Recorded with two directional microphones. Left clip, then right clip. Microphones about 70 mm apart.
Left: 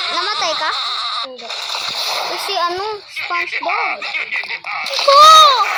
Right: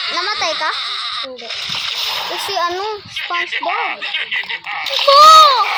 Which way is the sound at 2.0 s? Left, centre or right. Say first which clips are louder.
Even; right.